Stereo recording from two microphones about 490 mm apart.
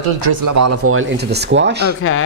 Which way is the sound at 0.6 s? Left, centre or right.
Right.